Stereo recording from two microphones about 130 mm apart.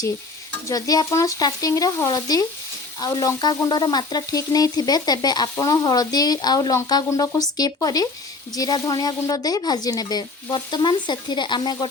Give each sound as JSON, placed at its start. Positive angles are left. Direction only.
{"t": 0.7, "sound": "speech", "side_deg": 30}
{"t": 3.0, "sound": "frying", "side_deg": 30}
{"t": 6.8, "sound": "speech", "side_deg": 30}
{"t": 8.5, "sound": "frying", "side_deg": 30}